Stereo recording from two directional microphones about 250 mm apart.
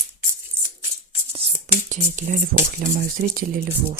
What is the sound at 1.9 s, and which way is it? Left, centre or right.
Speech, right.